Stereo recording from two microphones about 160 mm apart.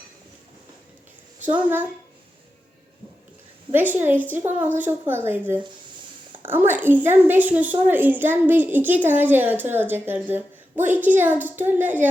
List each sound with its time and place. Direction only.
1.5 s a woman's voice: 10° right (ahead or behind)
3.7 s a woman's voice: 10° right (ahead or behind)
6.4 s a woman's voice: 10° right (ahead or behind)